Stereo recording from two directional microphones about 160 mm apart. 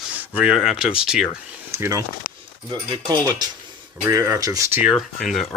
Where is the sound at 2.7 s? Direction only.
30° right (ahead or behind).